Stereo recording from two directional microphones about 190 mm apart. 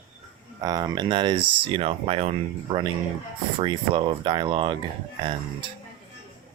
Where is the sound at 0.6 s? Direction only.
20° right (ahead or behind).